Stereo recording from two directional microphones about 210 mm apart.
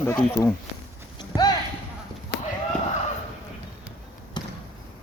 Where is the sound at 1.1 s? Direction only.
20° left (ahead or behind).